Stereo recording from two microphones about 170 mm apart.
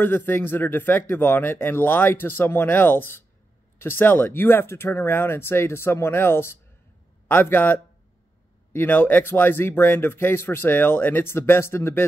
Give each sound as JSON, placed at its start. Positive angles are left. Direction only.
{"t": 0.0, "sound": "speech", "side_deg": 10}